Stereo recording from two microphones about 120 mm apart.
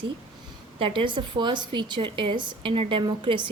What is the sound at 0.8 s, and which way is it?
A woman's voice, 45° right (ahead or behind).